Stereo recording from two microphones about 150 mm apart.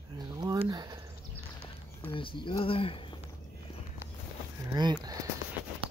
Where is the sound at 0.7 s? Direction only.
25° right (ahead or behind).